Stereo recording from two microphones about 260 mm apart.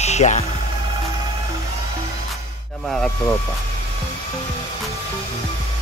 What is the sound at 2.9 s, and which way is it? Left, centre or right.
Speech, centre.